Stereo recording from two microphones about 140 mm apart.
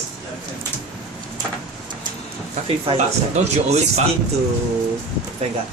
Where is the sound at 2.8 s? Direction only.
45° right (ahead or behind).